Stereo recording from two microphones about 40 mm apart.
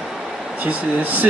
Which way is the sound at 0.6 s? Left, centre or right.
Right.